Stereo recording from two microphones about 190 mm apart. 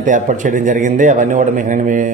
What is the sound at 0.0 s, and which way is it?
A man's voice, 40° right (ahead or behind).